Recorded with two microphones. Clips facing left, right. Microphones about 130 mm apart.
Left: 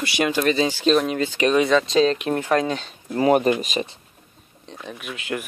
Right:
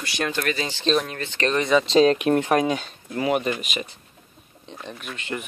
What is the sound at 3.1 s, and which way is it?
Speech, 40° left (ahead or behind).